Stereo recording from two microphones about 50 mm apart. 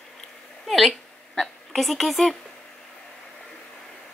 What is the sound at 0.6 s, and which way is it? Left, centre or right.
Speech, centre.